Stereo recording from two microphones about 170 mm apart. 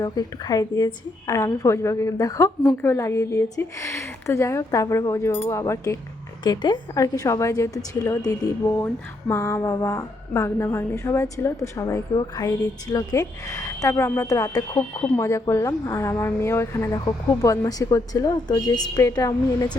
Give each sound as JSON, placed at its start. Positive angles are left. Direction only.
{"t": 0.0, "sound": "a woman's voice", "side_deg": 25}